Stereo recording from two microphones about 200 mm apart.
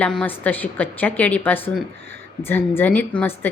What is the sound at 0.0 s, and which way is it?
A woman's voice, 5° left (ahead or behind).